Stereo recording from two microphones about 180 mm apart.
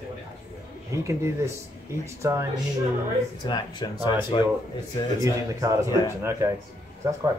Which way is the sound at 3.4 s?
25° left (ahead or behind).